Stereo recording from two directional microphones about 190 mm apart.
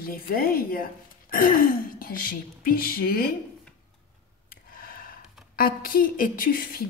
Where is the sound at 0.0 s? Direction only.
50° left (ahead or behind).